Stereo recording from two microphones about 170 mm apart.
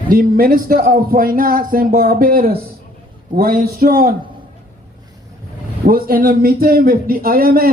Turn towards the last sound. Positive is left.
turn(degrees=-60)  # may be behind; listen again after turning